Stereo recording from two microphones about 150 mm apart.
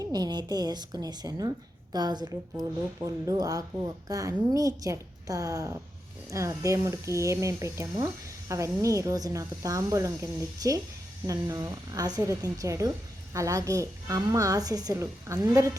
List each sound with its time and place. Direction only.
0.0 s a woman's voice: 25° right (ahead or behind)